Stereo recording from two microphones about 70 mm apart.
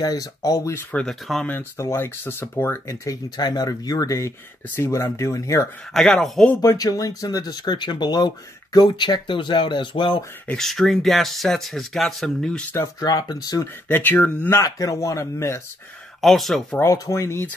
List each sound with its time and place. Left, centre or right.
0.0 s speech: left
1.3 s speech: centre
1.8 s speech: left
3.3 s speech: left
4.6 s speech: left
4.9 s speech: left
5.9 s speech: centre
6.6 s speech: left
10.6 s speech: centre
13.0 s speech: left
13.8 s speech: left
14.6 s speech: left
16.2 s speech: centre
16.8 s speech: left